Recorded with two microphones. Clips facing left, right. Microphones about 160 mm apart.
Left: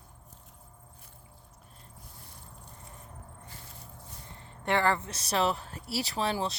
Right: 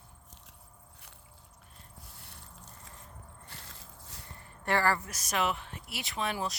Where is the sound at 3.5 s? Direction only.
85° right.